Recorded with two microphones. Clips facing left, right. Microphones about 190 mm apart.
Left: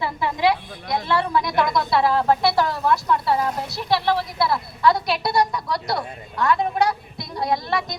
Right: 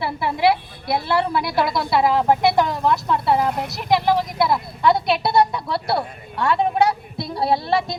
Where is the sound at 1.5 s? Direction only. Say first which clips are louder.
Even; 25° right (ahead or behind).